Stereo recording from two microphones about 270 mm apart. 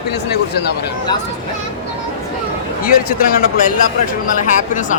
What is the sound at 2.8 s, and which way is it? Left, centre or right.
A man's voice, left.